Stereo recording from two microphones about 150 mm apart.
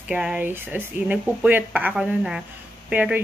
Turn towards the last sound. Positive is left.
turn(degrees=-10)  # may be behind; listen again after turning